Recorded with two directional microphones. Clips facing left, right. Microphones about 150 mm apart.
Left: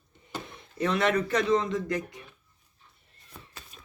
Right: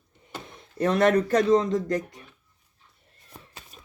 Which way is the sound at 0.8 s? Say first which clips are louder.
Right 5 dB; 45° right (ahead or behind).